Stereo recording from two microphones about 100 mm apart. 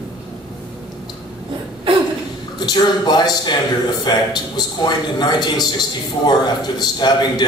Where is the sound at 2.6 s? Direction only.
45° left (ahead or behind).